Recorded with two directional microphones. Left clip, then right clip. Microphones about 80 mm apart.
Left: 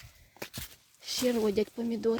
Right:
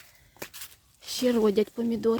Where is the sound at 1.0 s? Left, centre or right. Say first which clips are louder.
Right 3 dB; right.